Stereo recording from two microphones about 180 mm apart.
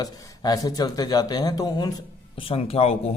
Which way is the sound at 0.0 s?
20° left (ahead or behind).